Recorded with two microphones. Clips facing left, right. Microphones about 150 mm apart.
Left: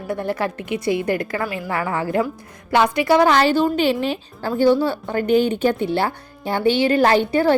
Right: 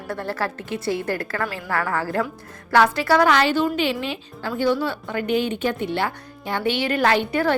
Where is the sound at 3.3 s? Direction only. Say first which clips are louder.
Left 3 dB; 35° left (ahead or behind).